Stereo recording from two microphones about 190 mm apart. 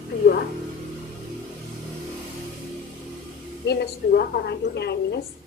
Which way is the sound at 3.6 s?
60° left (ahead or behind).